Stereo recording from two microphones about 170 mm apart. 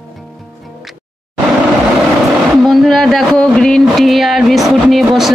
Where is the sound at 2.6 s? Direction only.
Centre (ahead or behind).